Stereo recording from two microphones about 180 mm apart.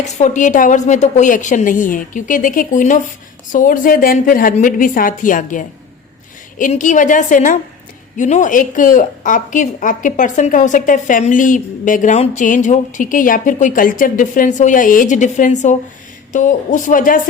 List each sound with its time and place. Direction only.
0.2 s a woman's voice: 45° left (ahead or behind)